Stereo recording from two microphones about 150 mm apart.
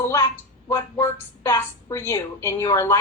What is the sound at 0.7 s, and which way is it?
A woman's voice, 20° left (ahead or behind).